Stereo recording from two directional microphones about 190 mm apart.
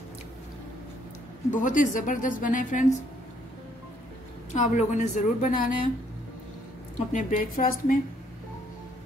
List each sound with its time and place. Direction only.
1.5 s a woman's voice: 40° left (ahead or behind)
4.6 s a woman's voice: 40° left (ahead or behind)
7.1 s a woman's voice: 40° left (ahead or behind)